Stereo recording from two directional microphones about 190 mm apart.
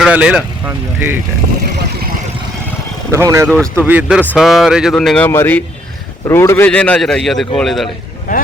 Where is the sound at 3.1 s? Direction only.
15° right (ahead or behind); by 7.9 s centre (ahead or behind).